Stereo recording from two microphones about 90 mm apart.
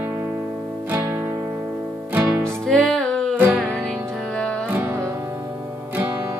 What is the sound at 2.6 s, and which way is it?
Music, 5° left (ahead or behind).